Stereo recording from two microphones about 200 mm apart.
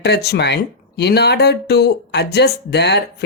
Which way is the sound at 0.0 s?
55° left (ahead or behind).